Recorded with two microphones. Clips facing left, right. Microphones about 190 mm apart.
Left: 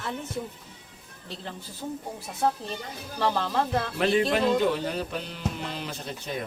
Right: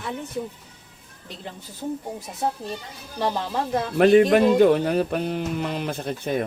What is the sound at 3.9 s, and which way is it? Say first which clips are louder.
Music: right 10 dB; 55° right (ahead or behind).